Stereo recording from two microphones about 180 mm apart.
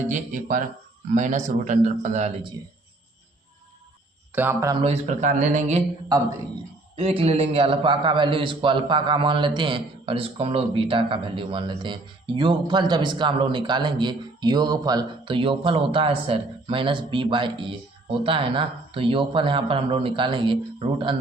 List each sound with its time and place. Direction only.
0.1 s a man's voice: 45° right (ahead or behind)
4.3 s speech: 10° right (ahead or behind)
4.7 s speech: 35° right (ahead or behind)
6.9 s a man's voice: 30° right (ahead or behind)